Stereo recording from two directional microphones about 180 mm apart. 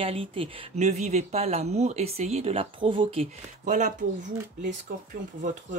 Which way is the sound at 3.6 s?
45° right (ahead or behind).